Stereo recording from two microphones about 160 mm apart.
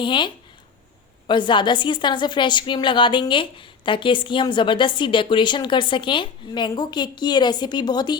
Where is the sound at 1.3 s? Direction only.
30° left (ahead or behind).